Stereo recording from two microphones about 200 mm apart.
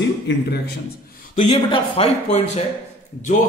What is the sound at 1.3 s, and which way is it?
Speech, 30° left (ahead or behind).